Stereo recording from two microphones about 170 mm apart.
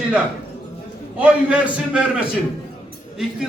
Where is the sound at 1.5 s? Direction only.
5° right (ahead or behind).